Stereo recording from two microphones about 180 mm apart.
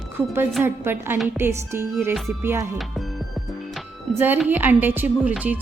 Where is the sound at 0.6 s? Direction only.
10° right (ahead or behind).